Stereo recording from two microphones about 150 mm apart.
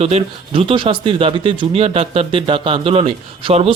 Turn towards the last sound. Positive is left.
turn(degrees=-40)  # may be behind; listen again after turning